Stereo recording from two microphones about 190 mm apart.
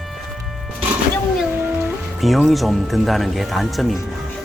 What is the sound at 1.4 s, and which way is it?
Music, 10° right (ahead or behind).